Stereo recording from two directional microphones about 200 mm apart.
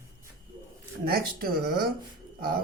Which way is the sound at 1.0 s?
50° right (ahead or behind).